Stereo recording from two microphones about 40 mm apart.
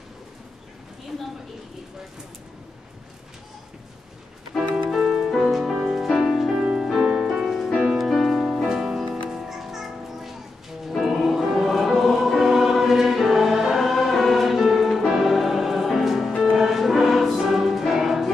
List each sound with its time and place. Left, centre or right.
4.8 s music: centre
6.5 s music: right
6.8 s music: centre
8.6 s music: centre